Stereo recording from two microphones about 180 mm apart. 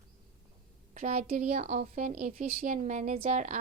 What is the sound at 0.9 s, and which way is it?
A woman's voice, 50° right (ahead or behind).